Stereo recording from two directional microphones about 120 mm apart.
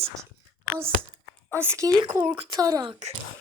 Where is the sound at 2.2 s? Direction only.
55° right (ahead or behind).